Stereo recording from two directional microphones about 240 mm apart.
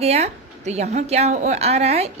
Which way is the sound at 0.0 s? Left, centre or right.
Right.